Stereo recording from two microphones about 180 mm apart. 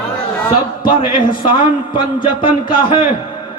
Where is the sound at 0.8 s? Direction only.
25° left (ahead or behind).